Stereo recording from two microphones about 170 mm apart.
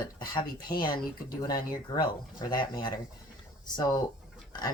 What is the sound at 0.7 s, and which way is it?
Speech, 25° left (ahead or behind).